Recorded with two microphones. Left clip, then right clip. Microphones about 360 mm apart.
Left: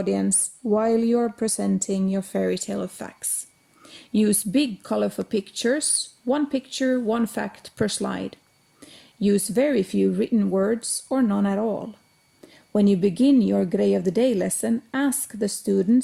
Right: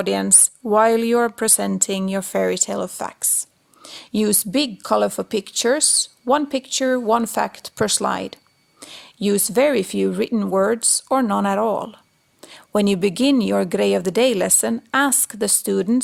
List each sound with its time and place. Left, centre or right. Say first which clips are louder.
0.0 s speech: right 5 dB; centre
8.8 s a sound: right 8 dB; centre
9.2 s speech: right 4 dB; centre
11.6 s speech: right 6 dB; right
12.4 s a woman's voice: right 3 dB; centre